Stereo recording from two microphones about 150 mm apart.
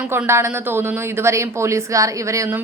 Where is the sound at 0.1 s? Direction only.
15° right (ahead or behind).